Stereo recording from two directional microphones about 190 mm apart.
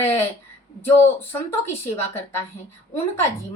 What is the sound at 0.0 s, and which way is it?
Speech, 10° left (ahead or behind).